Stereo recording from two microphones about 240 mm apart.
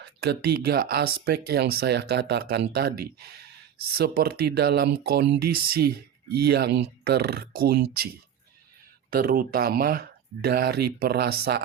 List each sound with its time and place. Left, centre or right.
0.0 s speech: right